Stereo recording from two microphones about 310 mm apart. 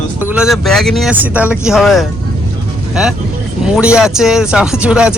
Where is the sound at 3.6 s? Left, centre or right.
Centre.